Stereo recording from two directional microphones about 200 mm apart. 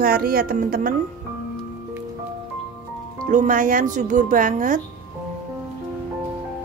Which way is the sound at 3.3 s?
40° right (ahead or behind).